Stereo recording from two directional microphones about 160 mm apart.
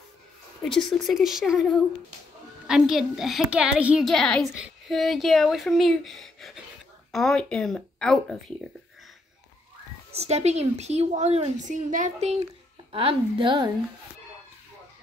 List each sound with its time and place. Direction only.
0.7 s a woman's voice: centre (ahead or behind)
10.1 s a woman's voice: 40° right (ahead or behind)